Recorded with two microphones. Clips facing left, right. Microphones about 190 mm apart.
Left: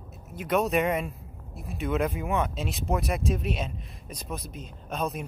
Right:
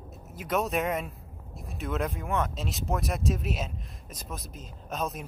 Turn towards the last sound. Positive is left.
turn(degrees=0)  # may be behind; listen again after turning